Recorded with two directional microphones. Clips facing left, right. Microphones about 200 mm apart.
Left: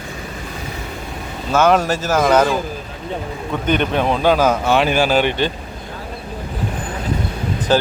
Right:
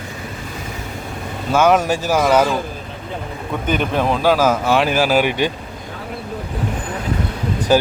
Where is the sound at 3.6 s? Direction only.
5° right (ahead or behind).